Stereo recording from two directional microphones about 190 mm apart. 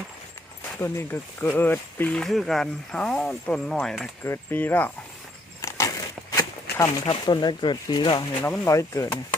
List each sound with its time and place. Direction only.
0.8 s speech: 10° left (ahead or behind)
5.6 s a sound: 15° left (ahead or behind)
8.4 s speech: 10° left (ahead or behind)